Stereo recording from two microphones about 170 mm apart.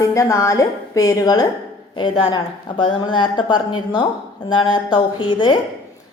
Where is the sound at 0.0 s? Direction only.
20° left (ahead or behind).